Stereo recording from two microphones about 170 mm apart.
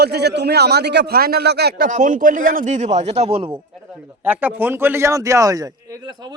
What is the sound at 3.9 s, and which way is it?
Speech, 10° right (ahead or behind).